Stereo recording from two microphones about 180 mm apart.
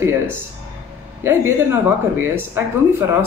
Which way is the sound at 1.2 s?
15° right (ahead or behind).